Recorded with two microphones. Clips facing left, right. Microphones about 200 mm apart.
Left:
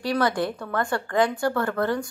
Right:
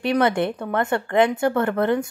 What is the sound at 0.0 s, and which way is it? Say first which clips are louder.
Speech: right 4 dB; 25° right (ahead or behind).